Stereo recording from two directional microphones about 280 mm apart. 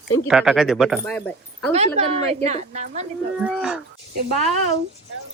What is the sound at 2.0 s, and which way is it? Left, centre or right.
A woman's voice, right.